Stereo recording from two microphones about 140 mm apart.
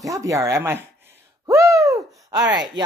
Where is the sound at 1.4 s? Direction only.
20° right (ahead or behind).